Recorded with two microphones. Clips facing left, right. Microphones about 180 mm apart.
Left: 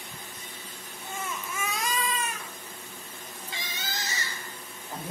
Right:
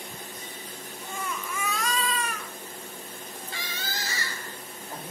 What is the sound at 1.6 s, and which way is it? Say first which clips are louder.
Baby cry: right 1 dB; 20° left (ahead or behind).